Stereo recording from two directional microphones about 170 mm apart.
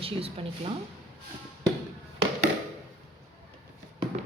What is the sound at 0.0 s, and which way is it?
Speech, 35° right (ahead or behind).